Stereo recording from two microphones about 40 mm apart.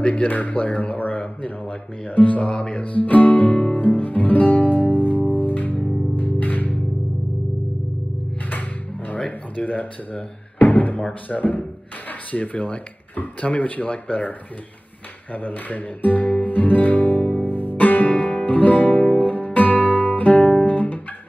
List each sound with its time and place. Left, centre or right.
0.1 s speech: left
3.7 s music: left
9.1 s music: left
11.2 s speech: left
15.3 s speech: left
17.4 s music: left
19.1 s guitar: left